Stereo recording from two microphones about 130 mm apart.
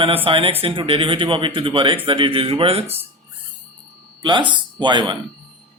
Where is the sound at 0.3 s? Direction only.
45° right (ahead or behind).